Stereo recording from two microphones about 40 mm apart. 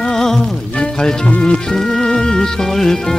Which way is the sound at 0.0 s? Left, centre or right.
Centre.